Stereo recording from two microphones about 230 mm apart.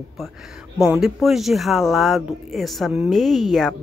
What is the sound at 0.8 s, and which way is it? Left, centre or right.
Speech, centre.